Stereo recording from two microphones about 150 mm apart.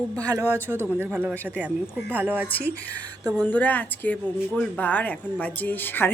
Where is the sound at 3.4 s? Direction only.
10° left (ahead or behind).